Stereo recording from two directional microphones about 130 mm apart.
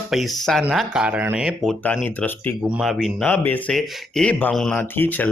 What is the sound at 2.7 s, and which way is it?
Speech, centre (ahead or behind).